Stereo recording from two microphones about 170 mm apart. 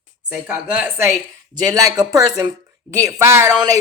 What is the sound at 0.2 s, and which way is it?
Speech, 5° right (ahead or behind).